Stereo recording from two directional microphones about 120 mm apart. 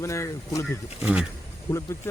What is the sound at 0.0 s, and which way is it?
Speech, 25° left (ahead or behind).